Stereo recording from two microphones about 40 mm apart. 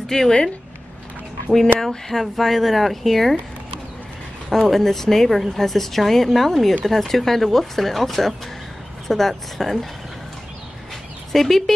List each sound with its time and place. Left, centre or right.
0.1 s speech: centre
1.8 s speech: centre
4.5 s speech: centre
11.3 s speech: centre